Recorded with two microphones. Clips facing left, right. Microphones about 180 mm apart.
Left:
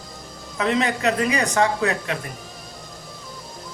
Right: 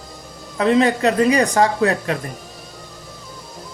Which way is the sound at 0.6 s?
35° right (ahead or behind).